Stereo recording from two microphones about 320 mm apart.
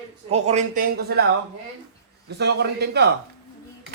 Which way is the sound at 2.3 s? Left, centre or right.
Right.